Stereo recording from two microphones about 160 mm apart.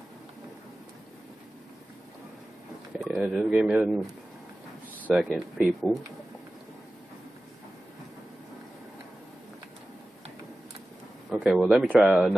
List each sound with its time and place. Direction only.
3.0 s speech: centre (ahead or behind)
11.2 s speech: 5° right (ahead or behind)